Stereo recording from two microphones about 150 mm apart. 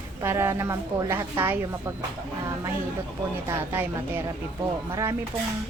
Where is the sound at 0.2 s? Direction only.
15° right (ahead or behind).